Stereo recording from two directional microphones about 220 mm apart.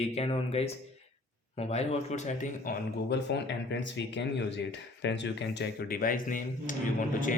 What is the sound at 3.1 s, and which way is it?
Speech, 50° left (ahead or behind).